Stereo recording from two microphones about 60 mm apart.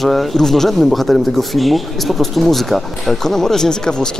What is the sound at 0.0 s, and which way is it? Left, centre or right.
Speech, centre.